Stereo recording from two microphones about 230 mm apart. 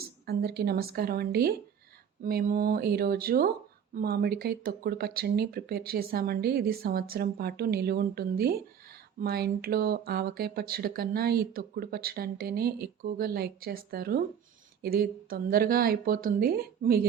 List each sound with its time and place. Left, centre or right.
0.0 s speech: right